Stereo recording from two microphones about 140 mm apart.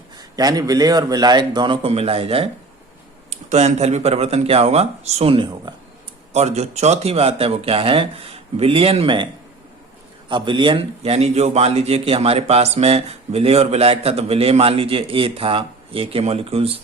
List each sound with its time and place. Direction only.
0.2 s a man's voice: 30° right (ahead or behind)
6.3 s a man's voice: 50° right (ahead or behind)
10.2 s a man's voice: 35° right (ahead or behind)